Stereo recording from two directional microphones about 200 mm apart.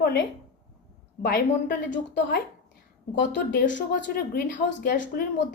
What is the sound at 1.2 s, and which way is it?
A woman's voice, 50° left (ahead or behind).